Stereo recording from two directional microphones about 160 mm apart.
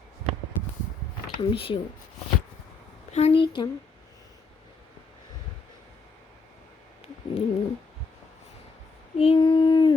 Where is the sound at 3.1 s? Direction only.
40° left (ahead or behind).